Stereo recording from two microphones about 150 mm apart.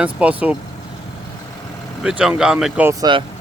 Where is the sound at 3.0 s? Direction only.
30° right (ahead or behind).